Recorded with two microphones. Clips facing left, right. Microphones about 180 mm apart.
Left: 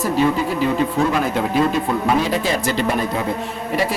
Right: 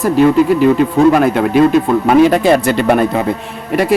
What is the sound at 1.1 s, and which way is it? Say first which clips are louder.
Speech: right 8 dB; 60° right (ahead or behind).